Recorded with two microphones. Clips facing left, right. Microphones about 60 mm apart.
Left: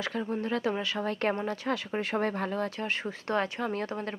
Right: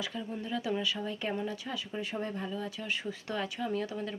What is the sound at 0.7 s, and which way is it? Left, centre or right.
Speech, left.